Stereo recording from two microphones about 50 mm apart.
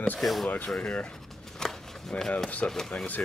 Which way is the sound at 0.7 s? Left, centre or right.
Left.